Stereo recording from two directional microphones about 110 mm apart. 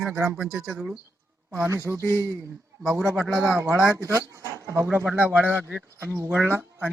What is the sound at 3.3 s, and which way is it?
Speech, 25° right (ahead or behind).